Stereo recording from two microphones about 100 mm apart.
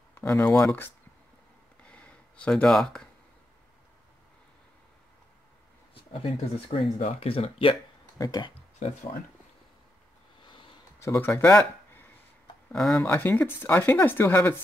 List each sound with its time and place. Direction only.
0.1 s speech: 25° left (ahead or behind)
1.9 s a sound: 10° left (ahead or behind)
5.9 s speech: 70° left (ahead or behind)
8.2 s speech: 40° left (ahead or behind)
11.0 s speech: 25° left (ahead or behind)
12.7 s speech: 5° left (ahead or behind)
13.0 s speech: 20° left (ahead or behind)